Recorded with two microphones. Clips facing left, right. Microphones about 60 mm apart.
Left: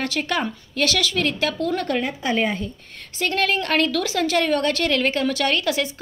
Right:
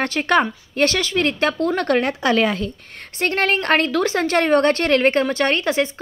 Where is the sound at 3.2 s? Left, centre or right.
Right.